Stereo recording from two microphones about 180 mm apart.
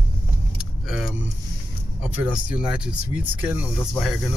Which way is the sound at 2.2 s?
5° right (ahead or behind).